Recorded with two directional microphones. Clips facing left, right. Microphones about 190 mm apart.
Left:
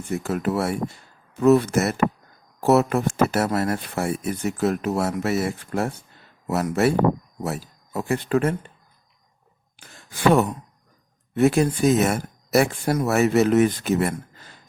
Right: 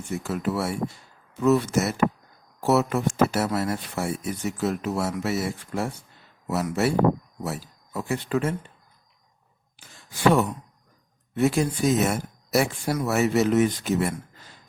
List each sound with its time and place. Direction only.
0.1 s speech: 55° left (ahead or behind)
11.3 s speech: 60° left (ahead or behind)